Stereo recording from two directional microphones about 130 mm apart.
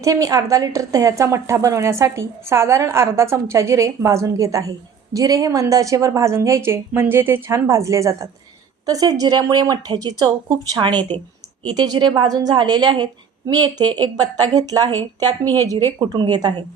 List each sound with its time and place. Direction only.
0.0 s a woman's voice: 25° right (ahead or behind)